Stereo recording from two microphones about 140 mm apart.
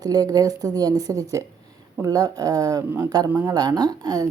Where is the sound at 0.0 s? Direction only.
25° right (ahead or behind).